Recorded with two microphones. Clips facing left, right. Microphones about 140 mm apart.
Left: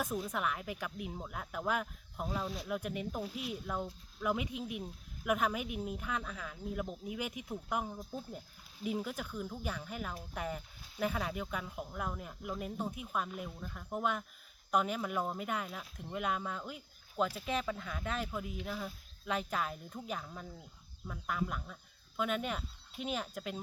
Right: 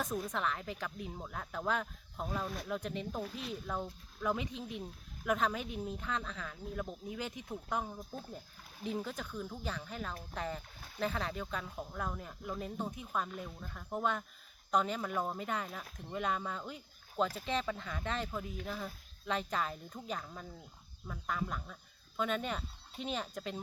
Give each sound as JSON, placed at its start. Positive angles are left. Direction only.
{"t": 0.0, "sound": "speech", "side_deg": 5}
{"t": 10.8, "sound": "speech", "side_deg": -55}
{"t": 11.0, "sound": "speech", "side_deg": 10}